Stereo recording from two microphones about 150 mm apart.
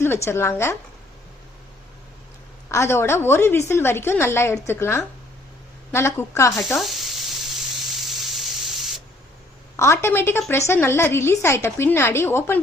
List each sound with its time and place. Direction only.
0.0 s a woman's voice: 15° left (ahead or behind)
2.6 s a woman's voice: 20° left (ahead or behind)
6.7 s a sound: centre (ahead or behind)
9.7 s a woman's voice: 20° left (ahead or behind)